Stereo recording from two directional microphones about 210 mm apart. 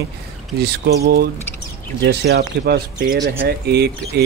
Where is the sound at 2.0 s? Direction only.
50° right (ahead or behind).